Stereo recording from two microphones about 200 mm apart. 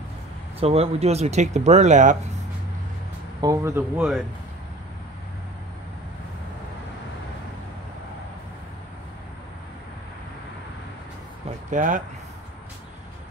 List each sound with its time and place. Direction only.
0.6 s speech: 30° right (ahead or behind)
3.3 s speech: 15° right (ahead or behind)
11.7 s speech: 40° right (ahead or behind)